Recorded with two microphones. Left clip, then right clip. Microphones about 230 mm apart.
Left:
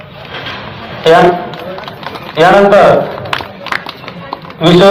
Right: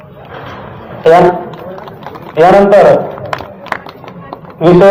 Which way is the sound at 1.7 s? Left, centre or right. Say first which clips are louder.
Left 3 dB; right.